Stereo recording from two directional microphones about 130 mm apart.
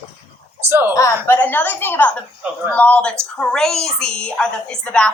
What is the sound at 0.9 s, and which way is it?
A woman's voice, 25° left (ahead or behind).